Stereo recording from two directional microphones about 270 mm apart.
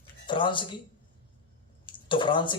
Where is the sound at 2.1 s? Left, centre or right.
Centre.